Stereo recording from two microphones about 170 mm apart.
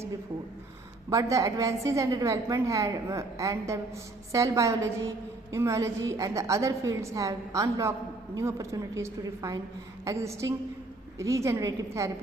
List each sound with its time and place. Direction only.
1.1 s a woman's voice: 20° right (ahead or behind)